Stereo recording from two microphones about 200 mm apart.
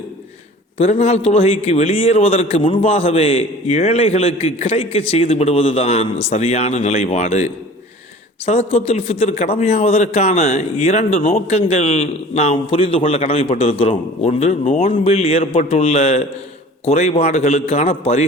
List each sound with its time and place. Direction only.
0.8 s a man's voice: 35° left (ahead or behind)